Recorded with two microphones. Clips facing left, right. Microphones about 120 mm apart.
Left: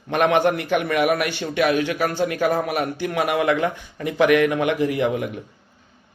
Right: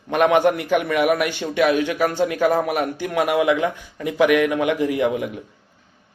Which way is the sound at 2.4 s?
20° right (ahead or behind).